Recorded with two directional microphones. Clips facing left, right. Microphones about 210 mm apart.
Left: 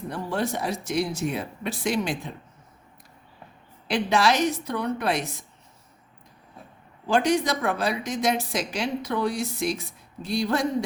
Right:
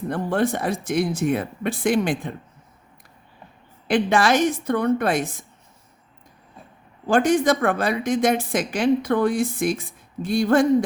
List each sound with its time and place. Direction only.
0.1 s speech: 55° right (ahead or behind)
3.8 s speech: 50° right (ahead or behind)
7.1 s speech: 50° right (ahead or behind)